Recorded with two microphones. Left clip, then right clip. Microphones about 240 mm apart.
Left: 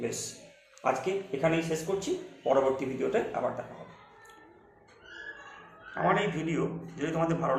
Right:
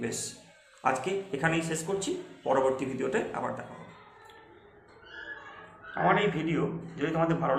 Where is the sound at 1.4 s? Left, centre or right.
Right.